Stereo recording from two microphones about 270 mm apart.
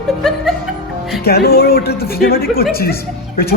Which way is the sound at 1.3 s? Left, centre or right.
Left.